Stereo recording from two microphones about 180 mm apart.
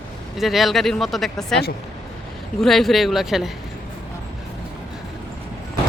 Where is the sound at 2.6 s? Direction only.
Centre (ahead or behind).